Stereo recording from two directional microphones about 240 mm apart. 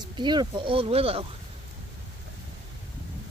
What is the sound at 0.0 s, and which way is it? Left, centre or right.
Speech, centre.